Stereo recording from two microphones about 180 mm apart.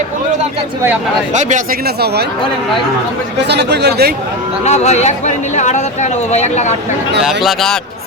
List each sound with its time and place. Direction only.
1.3 s speech: 40° right (ahead or behind)
3.5 s speech: 70° right (ahead or behind)
4.6 s speech: 40° left (ahead or behind)
7.2 s speech: centre (ahead or behind)